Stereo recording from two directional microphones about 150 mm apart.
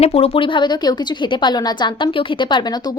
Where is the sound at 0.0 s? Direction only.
40° left (ahead or behind).